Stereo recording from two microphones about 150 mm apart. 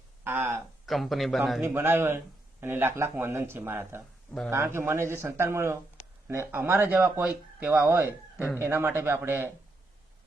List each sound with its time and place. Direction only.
0.3 s speech: 15° right (ahead or behind)
0.9 s speech: centre (ahead or behind)
1.6 s speech: 15° right (ahead or behind)
4.3 s speech: 5° left (ahead or behind)
4.5 s speech: 15° right (ahead or behind)